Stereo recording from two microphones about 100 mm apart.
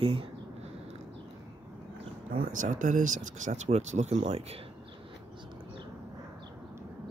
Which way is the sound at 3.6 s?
90° right.